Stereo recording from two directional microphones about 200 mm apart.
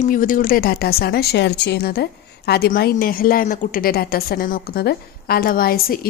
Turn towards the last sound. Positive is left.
turn(degrees=45)  # may be behind; listen again after turning